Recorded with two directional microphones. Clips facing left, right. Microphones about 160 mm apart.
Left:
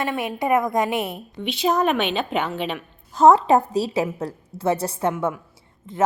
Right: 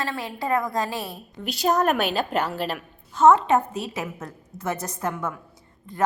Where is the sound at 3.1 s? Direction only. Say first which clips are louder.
Left 2 dB; 35° left (ahead or behind).